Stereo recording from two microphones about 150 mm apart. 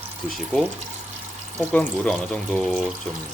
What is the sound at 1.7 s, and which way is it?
Speech, 5° left (ahead or behind).